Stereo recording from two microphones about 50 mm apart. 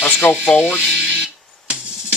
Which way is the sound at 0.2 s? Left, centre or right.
Left.